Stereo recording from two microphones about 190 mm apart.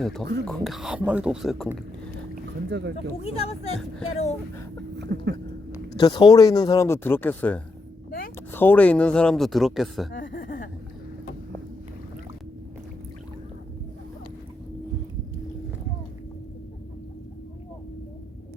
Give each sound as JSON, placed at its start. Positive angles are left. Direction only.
{"t": 0.0, "sound": "speech", "side_deg": 0}
{"t": 2.6, "sound": "speech", "side_deg": -65}
{"t": 3.2, "sound": "speech", "side_deg": 30}
{"t": 5.1, "sound": "speech", "side_deg": -60}
{"t": 6.0, "sound": "speech", "side_deg": 20}
{"t": 10.1, "sound": "a sound", "side_deg": 45}